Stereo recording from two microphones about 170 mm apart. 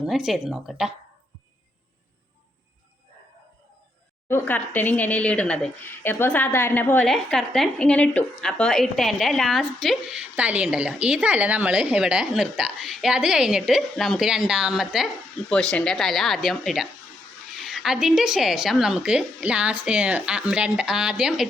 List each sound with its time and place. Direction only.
0.0 s speech: centre (ahead or behind)
4.3 s speech: 10° left (ahead or behind); by 21.4 s 5° right (ahead or behind)